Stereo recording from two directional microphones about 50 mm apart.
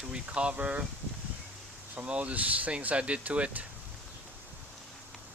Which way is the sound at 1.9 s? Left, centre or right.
Right.